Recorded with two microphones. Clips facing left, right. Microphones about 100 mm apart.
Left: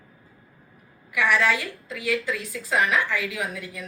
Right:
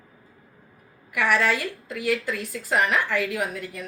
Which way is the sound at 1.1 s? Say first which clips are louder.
Even; 50° right (ahead or behind).